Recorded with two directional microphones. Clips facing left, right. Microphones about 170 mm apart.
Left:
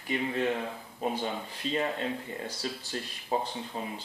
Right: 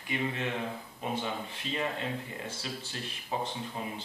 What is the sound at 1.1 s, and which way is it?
Speech, 35° left (ahead or behind).